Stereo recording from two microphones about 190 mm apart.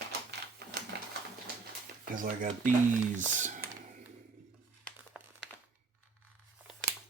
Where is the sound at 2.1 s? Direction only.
45° right (ahead or behind).